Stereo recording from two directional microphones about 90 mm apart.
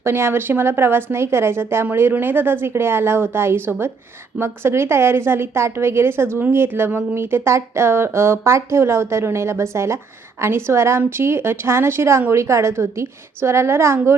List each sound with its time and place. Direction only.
0.0 s a woman's voice: 25° right (ahead or behind)